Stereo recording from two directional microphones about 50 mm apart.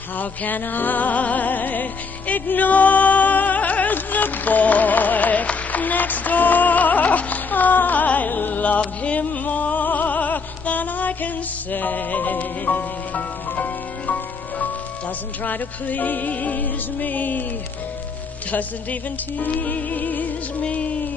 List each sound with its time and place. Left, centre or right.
0.2 s music: left
18.5 s music: left